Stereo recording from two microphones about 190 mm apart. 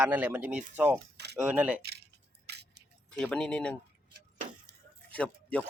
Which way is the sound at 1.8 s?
60° right (ahead or behind).